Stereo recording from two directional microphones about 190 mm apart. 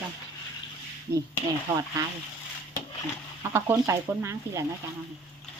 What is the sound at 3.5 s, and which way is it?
Speech, 10° right (ahead or behind).